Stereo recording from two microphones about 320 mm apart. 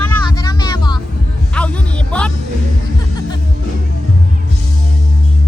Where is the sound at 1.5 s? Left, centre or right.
Centre.